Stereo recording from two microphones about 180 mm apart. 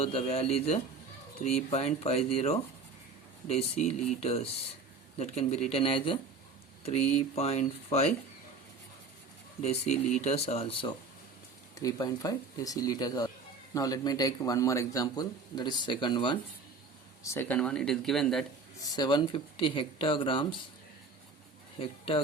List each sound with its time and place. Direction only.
0.0 s speech: 35° left (ahead or behind)
9.6 s speech: 40° left (ahead or behind)
11.7 s speech: 20° left (ahead or behind)
17.2 s speech: 10° left (ahead or behind)
18.8 s speech: 25° left (ahead or behind)
21.8 s a man's voice: 30° left (ahead or behind)